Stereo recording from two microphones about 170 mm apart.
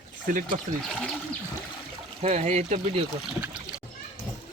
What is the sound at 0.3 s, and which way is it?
Speech, 50° right (ahead or behind).